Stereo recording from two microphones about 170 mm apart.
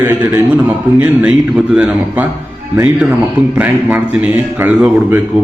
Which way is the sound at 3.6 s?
5° right (ahead or behind).